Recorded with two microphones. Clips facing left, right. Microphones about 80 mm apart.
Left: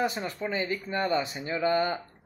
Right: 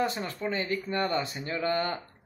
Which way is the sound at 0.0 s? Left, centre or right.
Centre.